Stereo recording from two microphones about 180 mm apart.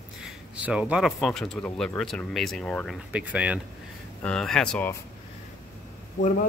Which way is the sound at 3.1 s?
5° right (ahead or behind).